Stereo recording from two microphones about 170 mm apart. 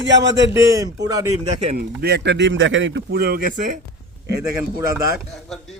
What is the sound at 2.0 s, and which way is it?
A man's voice, 75° right (ahead or behind).